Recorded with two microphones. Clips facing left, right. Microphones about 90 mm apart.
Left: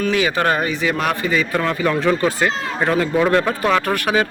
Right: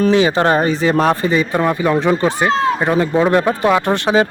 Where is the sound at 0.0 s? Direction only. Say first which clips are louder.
Right 5 dB; 30° right (ahead or behind).